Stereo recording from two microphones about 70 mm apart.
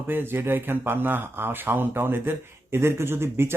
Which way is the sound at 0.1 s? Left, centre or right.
Right.